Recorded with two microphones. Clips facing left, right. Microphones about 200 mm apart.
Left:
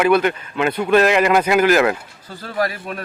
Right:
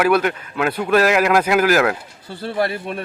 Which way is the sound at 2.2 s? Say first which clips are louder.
Right 1 dB; 30° right (ahead or behind).